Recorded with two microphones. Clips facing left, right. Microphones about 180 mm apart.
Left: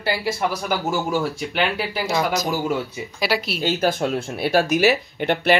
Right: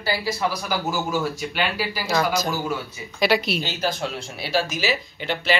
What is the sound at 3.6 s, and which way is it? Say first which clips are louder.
Speech: left 5 dB; 50° left (ahead or behind).